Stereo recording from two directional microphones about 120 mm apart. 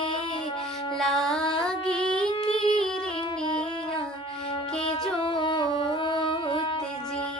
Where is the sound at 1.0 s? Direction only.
5° left (ahead or behind).